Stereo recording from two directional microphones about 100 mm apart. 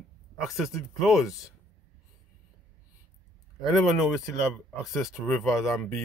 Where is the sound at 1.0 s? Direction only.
Centre (ahead or behind).